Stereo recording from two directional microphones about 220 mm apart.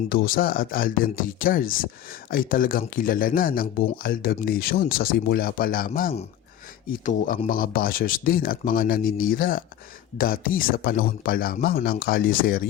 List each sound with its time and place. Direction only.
0.1 s speech: 40° left (ahead or behind)